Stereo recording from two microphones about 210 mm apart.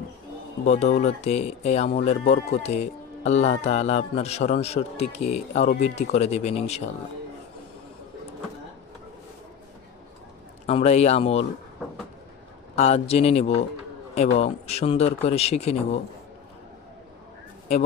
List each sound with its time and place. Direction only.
0.7 s speech: 30° left (ahead or behind)
10.7 s speech: 30° left (ahead or behind)
12.7 s speech: 30° left (ahead or behind)